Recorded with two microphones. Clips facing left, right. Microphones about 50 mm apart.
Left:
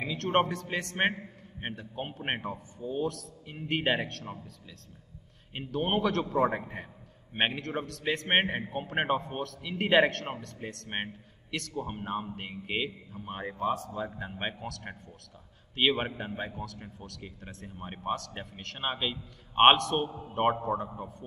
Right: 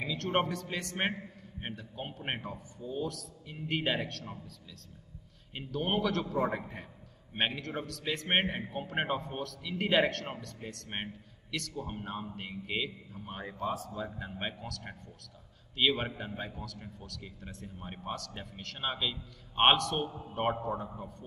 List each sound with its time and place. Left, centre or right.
0.0 s a man's voice: centre
5.5 s a man's voice: left